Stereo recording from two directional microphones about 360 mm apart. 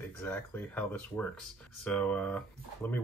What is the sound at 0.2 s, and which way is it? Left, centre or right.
Speech, centre.